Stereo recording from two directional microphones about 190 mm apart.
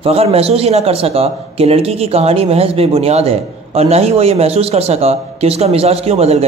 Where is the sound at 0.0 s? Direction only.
30° right (ahead or behind).